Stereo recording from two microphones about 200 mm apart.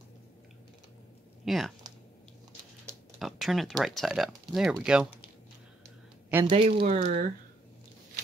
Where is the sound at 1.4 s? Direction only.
Centre (ahead or behind).